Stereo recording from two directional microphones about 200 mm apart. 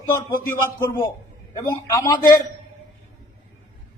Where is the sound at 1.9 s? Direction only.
20° left (ahead or behind).